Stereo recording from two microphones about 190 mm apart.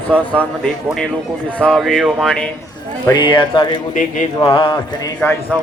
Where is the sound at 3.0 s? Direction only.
25° left (ahead or behind).